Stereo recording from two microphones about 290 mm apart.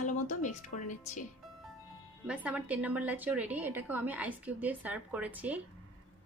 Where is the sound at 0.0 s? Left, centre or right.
Left.